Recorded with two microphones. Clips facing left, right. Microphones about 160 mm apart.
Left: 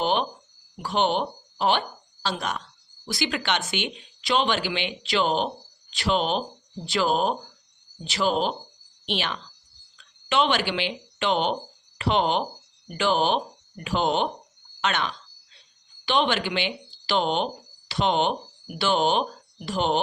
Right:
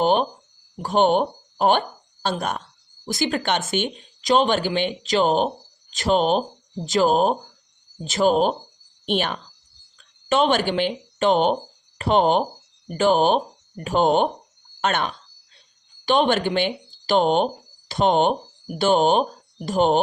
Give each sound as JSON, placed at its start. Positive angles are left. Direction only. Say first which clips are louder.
{"t": 0.0, "sound": "speech", "louder": "right 5 dB", "side_deg": -45}